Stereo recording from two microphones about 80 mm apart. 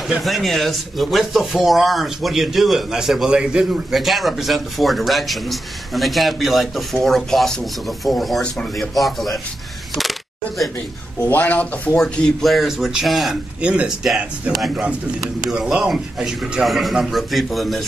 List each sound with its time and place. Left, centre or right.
0.2 s speech: centre
11.2 s speech: left
12.0 s speech: centre
13.6 s speech: centre
15.5 s speech: centre